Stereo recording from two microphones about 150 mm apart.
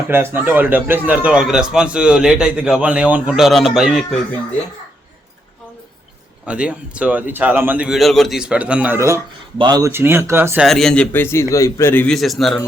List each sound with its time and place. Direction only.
0.1 s a man's voice: 15° right (ahead or behind)
6.4 s a man's voice: 5° right (ahead or behind); by 9.9 s 25° right (ahead or behind)
9.9 s a man's voice: 15° right (ahead or behind)
10.7 s a man's voice: 5° left (ahead or behind)
12.1 s a man's voice: centre (ahead or behind)